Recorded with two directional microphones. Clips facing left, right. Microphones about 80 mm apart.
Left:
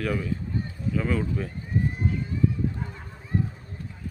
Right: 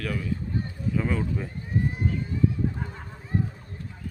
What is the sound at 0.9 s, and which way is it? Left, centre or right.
Speech, centre.